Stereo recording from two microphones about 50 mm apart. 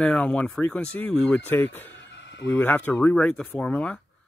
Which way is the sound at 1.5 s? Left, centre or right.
Left.